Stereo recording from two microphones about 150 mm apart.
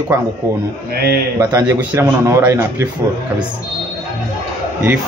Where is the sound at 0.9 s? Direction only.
90° right.